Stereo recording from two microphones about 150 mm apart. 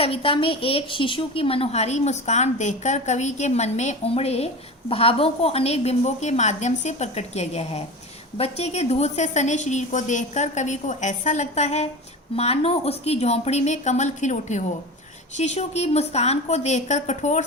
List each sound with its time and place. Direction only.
0.0 s a woman's voice: 40° left (ahead or behind)